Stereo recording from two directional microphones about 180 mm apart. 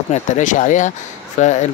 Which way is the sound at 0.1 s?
45° left (ahead or behind).